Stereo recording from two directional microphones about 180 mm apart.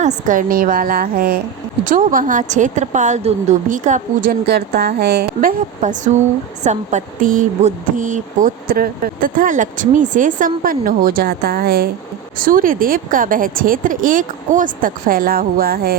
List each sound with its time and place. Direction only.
0.0 s speech: 45° right (ahead or behind)